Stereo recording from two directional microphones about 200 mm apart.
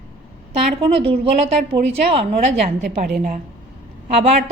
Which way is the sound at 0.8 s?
30° right (ahead or behind).